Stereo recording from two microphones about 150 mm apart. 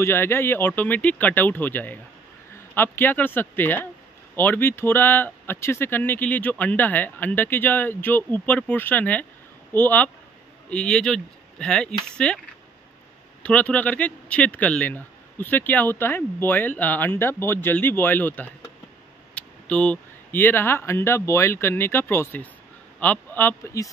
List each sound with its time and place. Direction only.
0.0 s speech: 15° left (ahead or behind)
13.4 s speech: 10° left (ahead or behind)